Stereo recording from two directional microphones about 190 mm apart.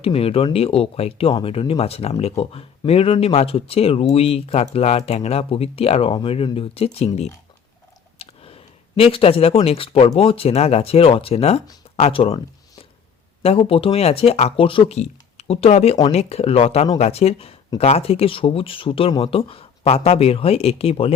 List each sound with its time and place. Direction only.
0.0 s speech: 30° left (ahead or behind)
8.2 s a sound: 30° left (ahead or behind)
9.1 s speech: 30° left (ahead or behind)
13.4 s speech: 30° left (ahead or behind)